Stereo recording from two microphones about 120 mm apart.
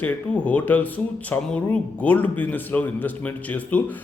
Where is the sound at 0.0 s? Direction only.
10° left (ahead or behind).